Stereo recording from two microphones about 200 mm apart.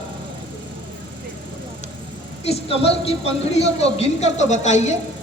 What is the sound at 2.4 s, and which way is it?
Speech, 30° left (ahead or behind).